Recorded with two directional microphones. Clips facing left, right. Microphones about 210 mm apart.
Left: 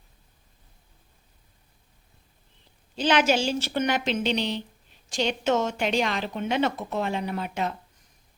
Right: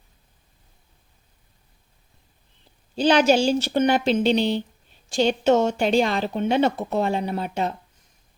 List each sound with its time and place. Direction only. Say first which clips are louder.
2.9 s speech: right 5 dB; 35° right (ahead or behind)